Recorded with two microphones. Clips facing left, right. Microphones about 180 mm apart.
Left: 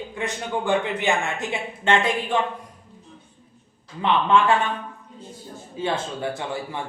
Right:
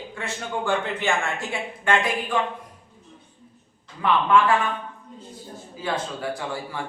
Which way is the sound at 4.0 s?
25° left (ahead or behind).